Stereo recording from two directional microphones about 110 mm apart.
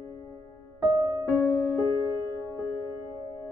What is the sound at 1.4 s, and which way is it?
Music, 20° left (ahead or behind).